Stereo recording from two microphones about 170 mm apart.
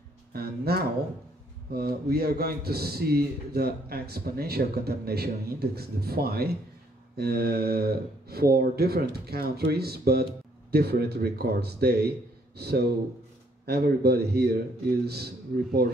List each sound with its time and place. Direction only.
0.3 s a man's voice: 65° right (ahead or behind)